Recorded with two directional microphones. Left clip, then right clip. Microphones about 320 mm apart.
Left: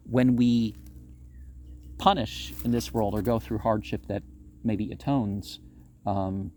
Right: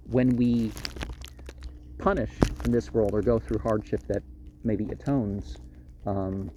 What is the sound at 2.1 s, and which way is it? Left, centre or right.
Speech, centre.